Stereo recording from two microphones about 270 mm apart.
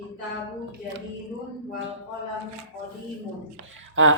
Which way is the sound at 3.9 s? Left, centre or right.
Right.